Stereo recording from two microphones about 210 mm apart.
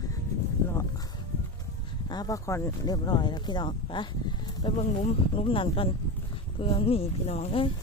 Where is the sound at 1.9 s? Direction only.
20° left (ahead or behind).